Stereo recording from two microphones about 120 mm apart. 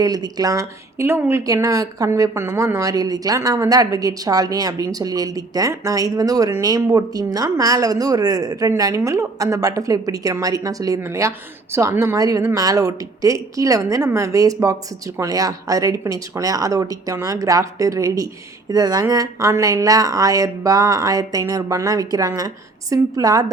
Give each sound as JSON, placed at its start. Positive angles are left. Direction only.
{"t": 0.0, "sound": "speech", "side_deg": -30}